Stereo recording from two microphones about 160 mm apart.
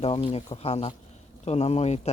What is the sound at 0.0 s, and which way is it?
Speech, 35° left (ahead or behind).